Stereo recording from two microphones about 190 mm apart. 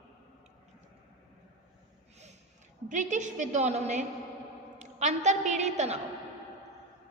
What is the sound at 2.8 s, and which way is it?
A woman's voice, 40° right (ahead or behind).